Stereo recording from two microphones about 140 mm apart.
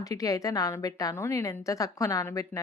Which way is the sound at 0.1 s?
25° left (ahead or behind).